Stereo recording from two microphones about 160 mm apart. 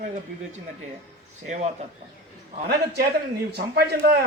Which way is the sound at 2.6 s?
90° right.